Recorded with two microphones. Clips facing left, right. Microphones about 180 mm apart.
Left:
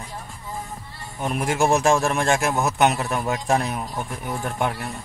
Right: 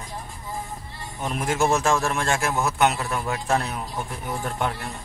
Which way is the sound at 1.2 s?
10° left (ahead or behind).